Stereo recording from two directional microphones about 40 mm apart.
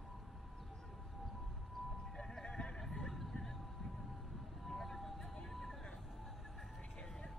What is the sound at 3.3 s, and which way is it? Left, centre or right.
Vehicle, centre.